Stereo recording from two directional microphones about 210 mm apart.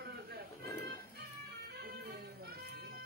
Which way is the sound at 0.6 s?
15° left (ahead or behind).